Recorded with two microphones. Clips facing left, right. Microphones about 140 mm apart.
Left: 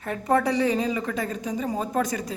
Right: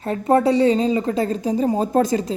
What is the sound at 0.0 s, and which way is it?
A woman's voice, 25° right (ahead or behind).